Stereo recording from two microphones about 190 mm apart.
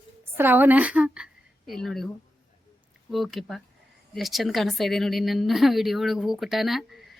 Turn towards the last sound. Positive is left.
turn(degrees=0)  # may be behind; listen again after turning